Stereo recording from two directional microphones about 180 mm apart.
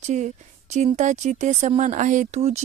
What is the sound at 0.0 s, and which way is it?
A woman's voice, 40° right (ahead or behind).